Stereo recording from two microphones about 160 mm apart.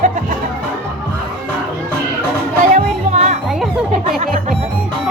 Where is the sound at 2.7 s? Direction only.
45° right (ahead or behind).